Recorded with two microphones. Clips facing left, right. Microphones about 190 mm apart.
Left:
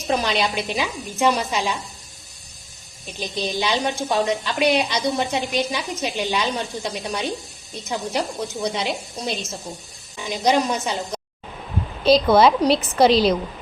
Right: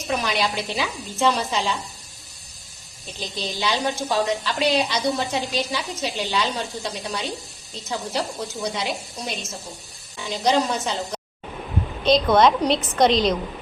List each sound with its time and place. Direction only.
0.2 s a woman's voice: 20° left (ahead or behind)
3.1 s a woman's voice: 15° left (ahead or behind)
8.9 s a woman's voice: centre (ahead or behind)
10.2 s a woman's voice: 15° left (ahead or behind)
12.0 s a woman's voice: 5° left (ahead or behind)